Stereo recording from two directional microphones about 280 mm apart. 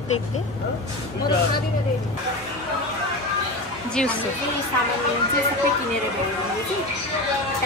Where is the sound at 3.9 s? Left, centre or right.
Centre.